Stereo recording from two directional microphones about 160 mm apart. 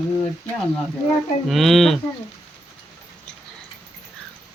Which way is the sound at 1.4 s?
Centre (ahead or behind).